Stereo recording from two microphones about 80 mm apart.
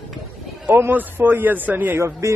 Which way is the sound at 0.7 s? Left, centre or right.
Right.